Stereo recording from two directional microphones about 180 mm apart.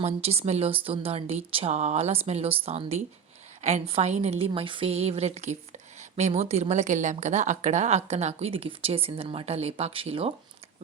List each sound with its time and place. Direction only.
0.0 s a woman's voice: 35° right (ahead or behind)